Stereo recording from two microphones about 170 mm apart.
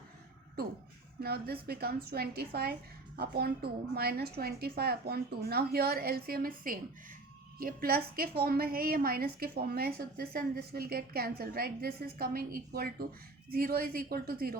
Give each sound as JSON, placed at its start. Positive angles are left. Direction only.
{"t": 1.2, "sound": "a woman's voice", "side_deg": -65}